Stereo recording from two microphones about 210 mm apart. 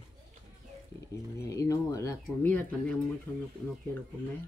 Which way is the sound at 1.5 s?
15° left (ahead or behind).